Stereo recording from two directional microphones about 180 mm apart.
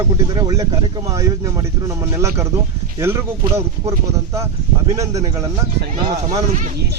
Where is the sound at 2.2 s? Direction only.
15° right (ahead or behind).